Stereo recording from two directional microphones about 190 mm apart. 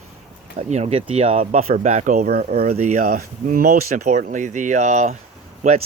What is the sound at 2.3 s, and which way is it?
Speech, 55° right (ahead or behind).